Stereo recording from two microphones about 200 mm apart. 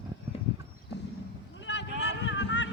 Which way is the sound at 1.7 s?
60° left (ahead or behind).